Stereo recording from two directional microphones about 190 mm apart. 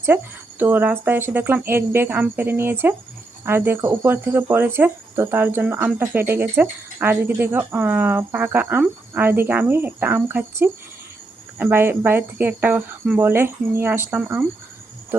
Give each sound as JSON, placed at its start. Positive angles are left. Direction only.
{"t": 0.6, "sound": "speech", "side_deg": -10}